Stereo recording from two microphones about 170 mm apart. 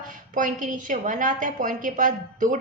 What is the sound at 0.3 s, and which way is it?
A woman's voice, 50° right (ahead or behind).